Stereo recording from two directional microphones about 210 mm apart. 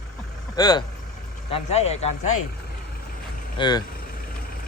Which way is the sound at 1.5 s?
30° left (ahead or behind).